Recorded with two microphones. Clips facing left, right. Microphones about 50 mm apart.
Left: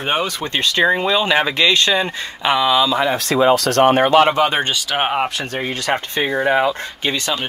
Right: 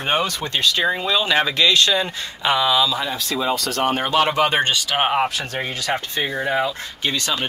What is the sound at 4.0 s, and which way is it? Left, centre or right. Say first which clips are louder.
Speech: left 6 dB; left.